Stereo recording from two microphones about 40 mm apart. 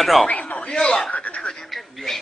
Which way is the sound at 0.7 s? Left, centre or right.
Centre.